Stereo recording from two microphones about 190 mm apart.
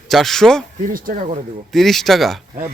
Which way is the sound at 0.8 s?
50° right (ahead or behind).